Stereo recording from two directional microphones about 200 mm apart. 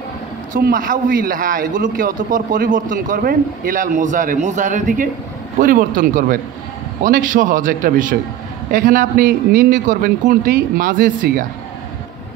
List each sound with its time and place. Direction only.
0.5 s a man's voice: 45° right (ahead or behind)